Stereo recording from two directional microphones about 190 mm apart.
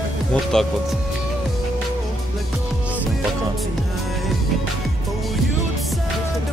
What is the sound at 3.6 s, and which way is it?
Music, centre (ahead or behind).